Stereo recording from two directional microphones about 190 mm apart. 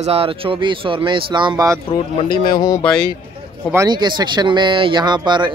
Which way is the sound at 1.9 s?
25° left (ahead or behind).